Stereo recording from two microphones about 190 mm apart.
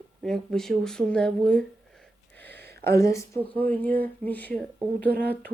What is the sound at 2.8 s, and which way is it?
Speech, 15° left (ahead or behind).